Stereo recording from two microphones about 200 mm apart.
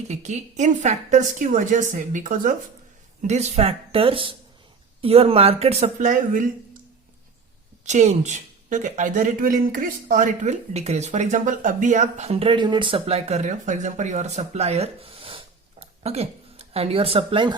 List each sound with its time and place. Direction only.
0.1 s speech: 35° right (ahead or behind)
7.9 s speech: 35° right (ahead or behind)